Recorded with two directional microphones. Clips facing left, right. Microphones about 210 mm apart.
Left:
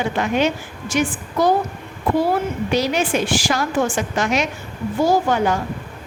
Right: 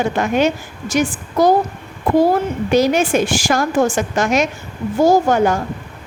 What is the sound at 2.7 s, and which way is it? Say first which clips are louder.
A woman's voice: right 6 dB; 50° right (ahead or behind).